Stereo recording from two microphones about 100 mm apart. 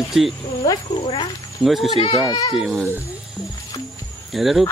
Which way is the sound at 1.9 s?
65° left (ahead or behind).